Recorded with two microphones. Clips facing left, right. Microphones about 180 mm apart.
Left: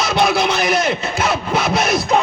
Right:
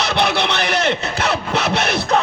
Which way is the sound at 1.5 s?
70° right (ahead or behind).